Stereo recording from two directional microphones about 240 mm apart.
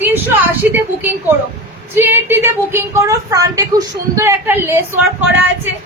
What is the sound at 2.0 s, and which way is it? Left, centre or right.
A woman's voice, centre.